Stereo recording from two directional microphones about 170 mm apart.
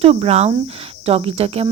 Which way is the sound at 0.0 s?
35° right (ahead or behind).